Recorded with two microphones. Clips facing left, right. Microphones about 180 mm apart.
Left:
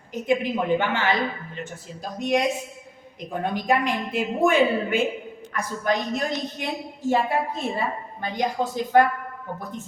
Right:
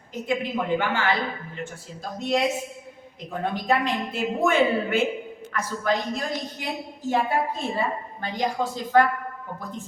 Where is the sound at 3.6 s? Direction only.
15° left (ahead or behind).